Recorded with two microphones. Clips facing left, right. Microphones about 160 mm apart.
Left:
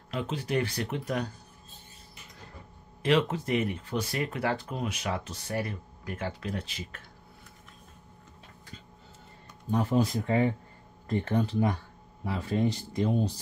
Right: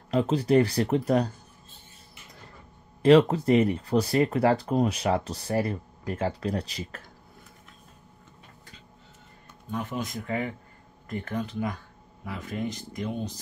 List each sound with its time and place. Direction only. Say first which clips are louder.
0.1 s speech: right 9 dB; 35° right (ahead or behind)
3.0 s speech: right 8 dB; 35° right (ahead or behind)
9.7 s speech: left 6 dB; 35° left (ahead or behind)